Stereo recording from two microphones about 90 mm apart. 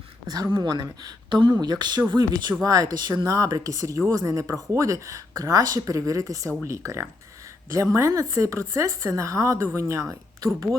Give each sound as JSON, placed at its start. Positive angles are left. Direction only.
{"t": 0.5, "sound": "speech", "side_deg": -50}
{"t": 2.6, "sound": "speech", "side_deg": -40}